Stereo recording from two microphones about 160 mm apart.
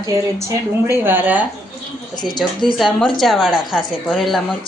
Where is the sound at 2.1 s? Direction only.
25° left (ahead or behind).